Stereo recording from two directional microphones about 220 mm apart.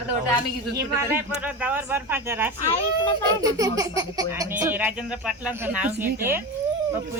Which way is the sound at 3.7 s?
15° right (ahead or behind).